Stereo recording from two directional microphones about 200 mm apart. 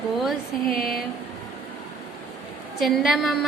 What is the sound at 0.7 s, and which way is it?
Speech, centre (ahead or behind).